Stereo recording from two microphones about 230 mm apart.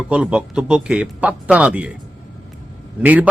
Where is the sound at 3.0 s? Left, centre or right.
Centre.